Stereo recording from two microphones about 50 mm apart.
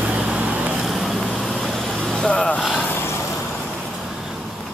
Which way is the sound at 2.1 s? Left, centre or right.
Centre.